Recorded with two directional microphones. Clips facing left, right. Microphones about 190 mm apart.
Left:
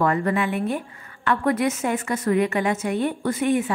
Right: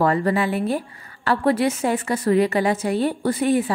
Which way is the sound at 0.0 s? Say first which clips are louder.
Right 2 dB; 35° right (ahead or behind).